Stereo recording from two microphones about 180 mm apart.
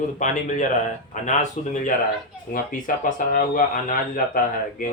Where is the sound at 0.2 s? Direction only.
45° left (ahead or behind).